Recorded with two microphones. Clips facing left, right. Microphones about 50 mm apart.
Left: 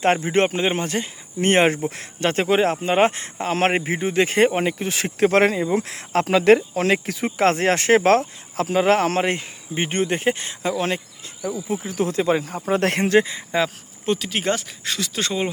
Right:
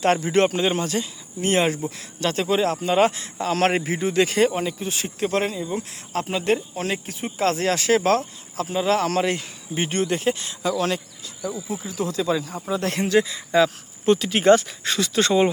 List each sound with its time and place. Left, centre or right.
0.0 s speech: left
1.4 s speech: left
4.9 s speech: left
7.3 s speech: left
11.7 s speech: left
14.0 s speech: centre